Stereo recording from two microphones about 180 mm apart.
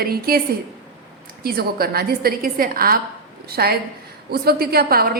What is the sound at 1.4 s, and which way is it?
A woman's voice, 60° right (ahead or behind).